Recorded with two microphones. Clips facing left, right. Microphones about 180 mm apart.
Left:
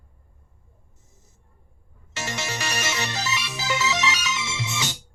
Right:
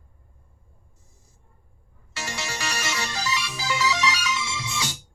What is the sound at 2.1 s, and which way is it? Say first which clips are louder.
Music: left 2 dB; 20° left (ahead or behind).